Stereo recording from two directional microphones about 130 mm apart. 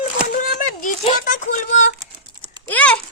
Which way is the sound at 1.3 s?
70° left (ahead or behind).